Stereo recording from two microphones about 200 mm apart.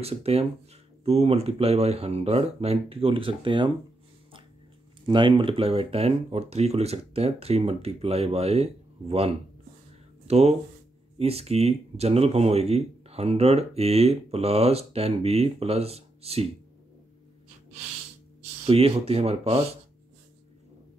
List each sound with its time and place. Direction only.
0.0 s speech: 30° right (ahead or behind)
5.0 s speech: 25° right (ahead or behind)
18.7 s speech: 30° right (ahead or behind)